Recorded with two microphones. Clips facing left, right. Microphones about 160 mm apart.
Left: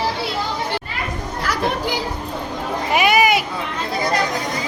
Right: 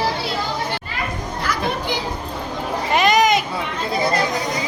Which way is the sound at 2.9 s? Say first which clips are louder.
Even; 10° left (ahead or behind).